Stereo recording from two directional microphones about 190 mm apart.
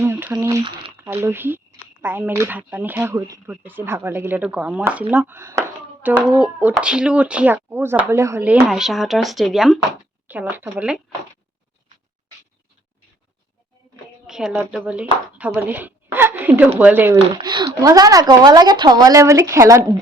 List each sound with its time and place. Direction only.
0.0 s a sound: 10° right (ahead or behind)
0.3 s speech: 20° right (ahead or behind)
0.9 s a child's voice: 10° right (ahead or behind)
14.3 s a child's voice: 5° right (ahead or behind)
17.3 s a woman's voice: 20° right (ahead or behind)